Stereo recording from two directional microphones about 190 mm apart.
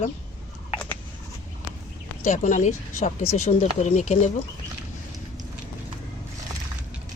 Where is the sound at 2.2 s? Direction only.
40° left (ahead or behind).